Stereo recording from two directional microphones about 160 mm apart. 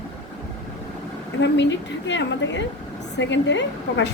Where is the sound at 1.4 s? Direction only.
90° left.